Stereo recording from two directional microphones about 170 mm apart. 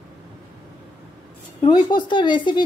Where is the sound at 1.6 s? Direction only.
25° left (ahead or behind).